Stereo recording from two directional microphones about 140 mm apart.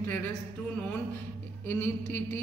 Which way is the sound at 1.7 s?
15° left (ahead or behind).